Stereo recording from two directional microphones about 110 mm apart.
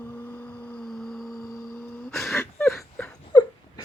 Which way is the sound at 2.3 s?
25° left (ahead or behind).